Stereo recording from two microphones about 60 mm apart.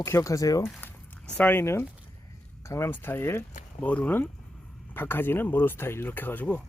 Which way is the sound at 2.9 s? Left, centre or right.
Left.